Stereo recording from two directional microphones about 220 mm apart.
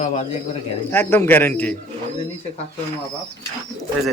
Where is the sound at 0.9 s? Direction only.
10° left (ahead or behind).